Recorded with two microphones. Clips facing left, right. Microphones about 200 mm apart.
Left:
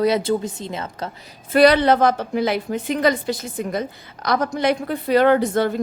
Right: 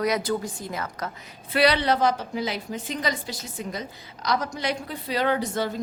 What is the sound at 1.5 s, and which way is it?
A woman's voice, 50° left (ahead or behind).